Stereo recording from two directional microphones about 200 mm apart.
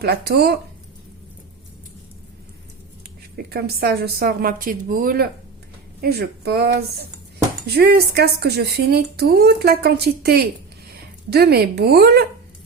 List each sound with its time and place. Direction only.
0.0 s speech: 55° right (ahead or behind)
3.5 s speech: 50° right (ahead or behind)